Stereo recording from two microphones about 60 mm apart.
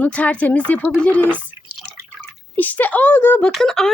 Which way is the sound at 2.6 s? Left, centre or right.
Left.